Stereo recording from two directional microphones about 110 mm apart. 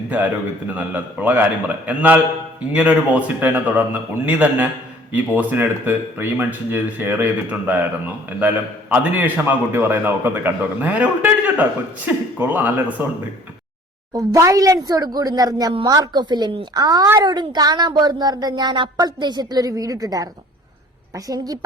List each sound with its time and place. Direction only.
0.1 s speech: 15° right (ahead or behind)
14.1 s speech: 30° right (ahead or behind)
21.2 s speech: 35° right (ahead or behind)